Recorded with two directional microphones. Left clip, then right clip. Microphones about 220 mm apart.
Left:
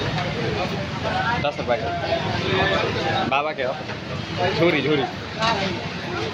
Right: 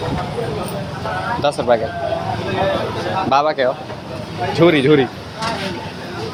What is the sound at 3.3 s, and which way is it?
Speech, 20° right (ahead or behind).